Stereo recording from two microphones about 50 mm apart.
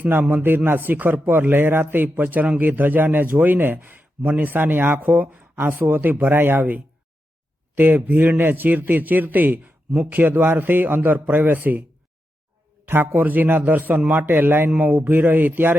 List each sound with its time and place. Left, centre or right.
0.0 s a man's voice: right
12.8 s a man's voice: right
14.7 s a man's voice: right